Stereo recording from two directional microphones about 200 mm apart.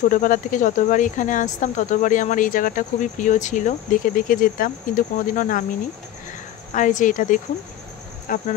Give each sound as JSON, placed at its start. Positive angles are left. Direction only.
{"t": 0.1, "sound": "speech", "side_deg": 40}
{"t": 6.7, "sound": "speech", "side_deg": 40}